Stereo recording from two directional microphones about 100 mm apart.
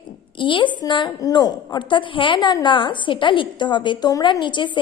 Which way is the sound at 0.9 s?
45° left (ahead or behind).